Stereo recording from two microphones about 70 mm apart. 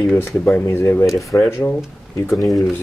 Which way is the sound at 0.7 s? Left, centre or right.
Left.